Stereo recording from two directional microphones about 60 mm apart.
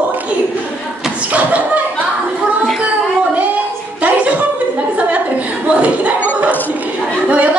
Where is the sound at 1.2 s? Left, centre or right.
Right.